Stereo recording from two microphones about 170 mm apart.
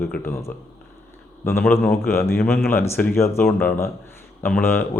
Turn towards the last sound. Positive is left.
turn(degrees=10)  # may be behind; listen again after turning